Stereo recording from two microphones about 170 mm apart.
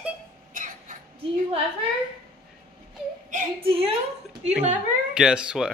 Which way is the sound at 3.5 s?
35° right (ahead or behind).